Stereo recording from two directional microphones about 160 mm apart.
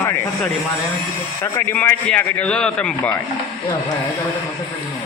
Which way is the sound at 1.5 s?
10° left (ahead or behind).